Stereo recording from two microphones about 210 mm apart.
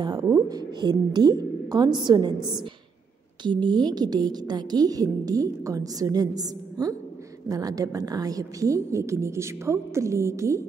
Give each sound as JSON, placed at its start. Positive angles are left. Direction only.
{"t": 0.0, "sound": "a woman's voice", "side_deg": -15}
{"t": 3.6, "sound": "a woman's voice", "side_deg": -20}